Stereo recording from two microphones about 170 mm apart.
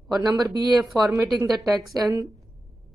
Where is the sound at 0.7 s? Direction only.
Centre (ahead or behind).